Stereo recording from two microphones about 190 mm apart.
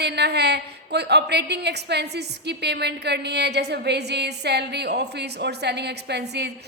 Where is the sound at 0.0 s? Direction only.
60° right (ahead or behind).